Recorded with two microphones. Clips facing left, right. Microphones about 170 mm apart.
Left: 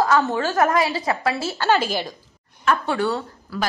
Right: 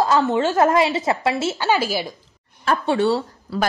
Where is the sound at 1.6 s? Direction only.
10° right (ahead or behind).